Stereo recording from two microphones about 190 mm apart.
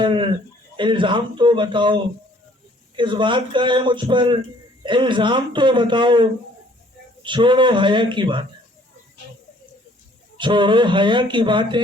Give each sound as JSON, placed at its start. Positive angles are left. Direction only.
{"t": 0.0, "sound": "speech", "side_deg": -25}
{"t": 10.3, "sound": "speech", "side_deg": -25}